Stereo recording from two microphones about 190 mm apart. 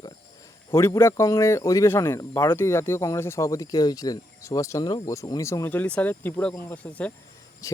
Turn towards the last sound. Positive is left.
turn(degrees=15)  # may be behind; listen again after turning